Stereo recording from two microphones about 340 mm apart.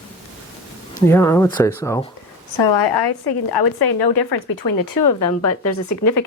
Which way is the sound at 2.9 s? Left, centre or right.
Left.